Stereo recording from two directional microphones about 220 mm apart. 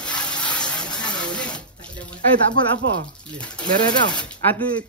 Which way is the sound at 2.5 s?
65° right (ahead or behind).